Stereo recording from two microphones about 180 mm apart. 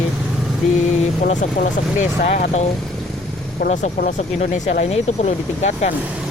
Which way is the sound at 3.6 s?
45° left (ahead or behind).